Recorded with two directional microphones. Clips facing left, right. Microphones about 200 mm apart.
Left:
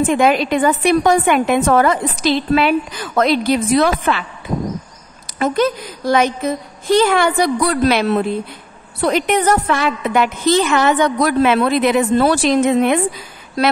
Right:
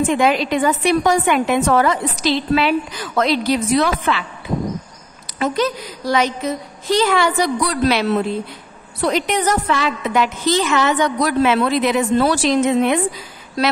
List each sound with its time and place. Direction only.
0.0 s a woman's voice: 50° left (ahead or behind)
5.2 s a woman's voice: 50° left (ahead or behind)